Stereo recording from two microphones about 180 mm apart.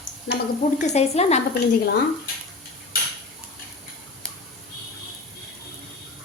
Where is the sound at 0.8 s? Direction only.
35° left (ahead or behind).